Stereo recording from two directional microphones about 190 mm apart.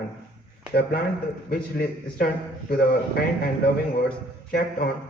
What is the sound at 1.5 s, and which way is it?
Speech, 50° left (ahead or behind).